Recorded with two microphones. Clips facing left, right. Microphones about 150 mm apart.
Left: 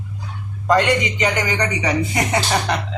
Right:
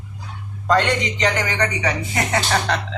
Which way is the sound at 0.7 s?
10° left (ahead or behind).